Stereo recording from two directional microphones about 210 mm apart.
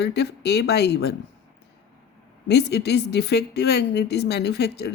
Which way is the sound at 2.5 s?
55° left (ahead or behind).